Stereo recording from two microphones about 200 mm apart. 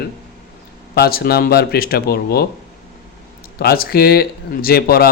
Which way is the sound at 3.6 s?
50° left (ahead or behind).